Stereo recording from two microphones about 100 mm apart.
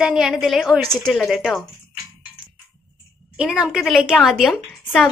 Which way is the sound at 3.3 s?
5° right (ahead or behind).